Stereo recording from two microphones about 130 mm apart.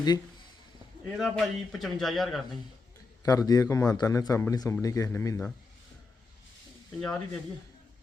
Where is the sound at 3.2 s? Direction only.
30° left (ahead or behind).